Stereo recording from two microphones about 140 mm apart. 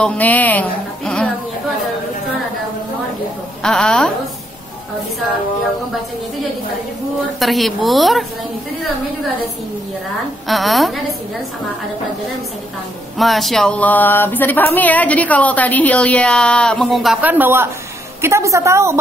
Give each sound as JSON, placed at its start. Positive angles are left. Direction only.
{"t": 0.0, "sound": "a woman's voice", "side_deg": 10}
{"t": 3.6, "sound": "a woman's voice", "side_deg": 5}
{"t": 7.3, "sound": "a woman's voice", "side_deg": 0}
{"t": 10.5, "sound": "a woman's voice", "side_deg": 0}
{"t": 13.2, "sound": "a sound", "side_deg": 0}
{"t": 17.2, "sound": "a woman's voice", "side_deg": -15}